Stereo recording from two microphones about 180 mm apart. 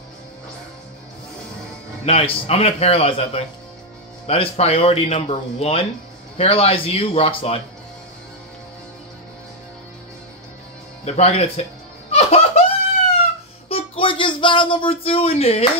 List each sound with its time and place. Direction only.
2.0 s speech: 30° left (ahead or behind)
11.1 s speech: 35° left (ahead or behind)
12.1 s laughter: 35° left (ahead or behind)
13.7 s a sound: 30° left (ahead or behind)